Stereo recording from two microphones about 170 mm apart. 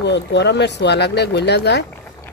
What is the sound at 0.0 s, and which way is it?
Speech, 90° left.